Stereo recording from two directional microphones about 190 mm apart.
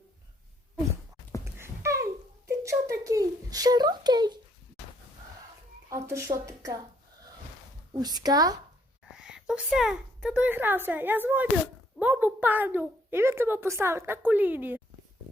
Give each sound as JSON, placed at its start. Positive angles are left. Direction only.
{"t": 1.5, "sound": "a sound", "side_deg": -15}
{"t": 5.9, "sound": "speech", "side_deg": -15}
{"t": 7.9, "sound": "speech", "side_deg": -20}
{"t": 9.1, "sound": "a woman's voice", "side_deg": -5}